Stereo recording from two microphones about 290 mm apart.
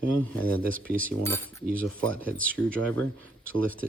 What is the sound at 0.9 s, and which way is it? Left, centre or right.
Cutlery, right.